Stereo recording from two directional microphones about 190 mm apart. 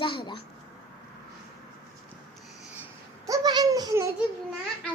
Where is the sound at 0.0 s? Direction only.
25° left (ahead or behind).